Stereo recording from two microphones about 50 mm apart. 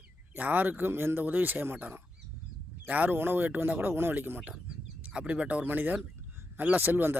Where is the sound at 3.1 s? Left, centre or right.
Right.